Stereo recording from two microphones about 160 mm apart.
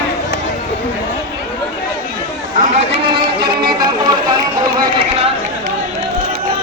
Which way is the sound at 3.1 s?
30° right (ahead or behind).